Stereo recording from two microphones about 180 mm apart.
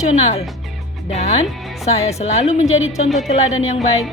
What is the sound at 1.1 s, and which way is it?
A woman's voice, 35° left (ahead or behind).